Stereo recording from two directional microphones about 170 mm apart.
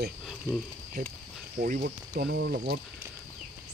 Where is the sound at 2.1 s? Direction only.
85° right.